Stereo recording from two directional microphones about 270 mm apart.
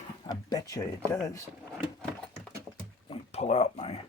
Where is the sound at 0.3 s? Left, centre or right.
Centre.